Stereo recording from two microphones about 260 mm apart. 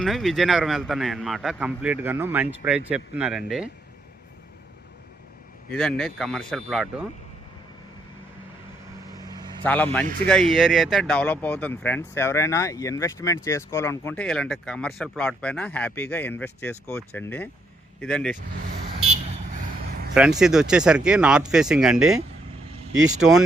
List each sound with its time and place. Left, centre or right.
0.0 s a man's voice: centre
5.7 s a man's voice: centre
9.2 s vehicle: centre
10.2 s a man's voice: centre
20.4 s a man's voice: centre